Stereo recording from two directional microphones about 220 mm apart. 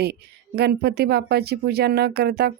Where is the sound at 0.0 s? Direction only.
45° right (ahead or behind).